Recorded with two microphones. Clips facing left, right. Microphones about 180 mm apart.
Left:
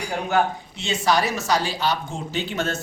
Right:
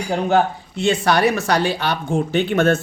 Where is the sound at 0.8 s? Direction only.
60° right (ahead or behind).